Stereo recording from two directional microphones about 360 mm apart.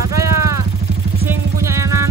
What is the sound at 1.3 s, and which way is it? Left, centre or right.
Vehicle, centre.